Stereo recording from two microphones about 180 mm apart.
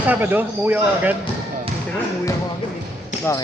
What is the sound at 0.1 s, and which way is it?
Speech, 10° right (ahead or behind).